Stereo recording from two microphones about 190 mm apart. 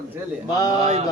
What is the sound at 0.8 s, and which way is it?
Speech, 35° right (ahead or behind).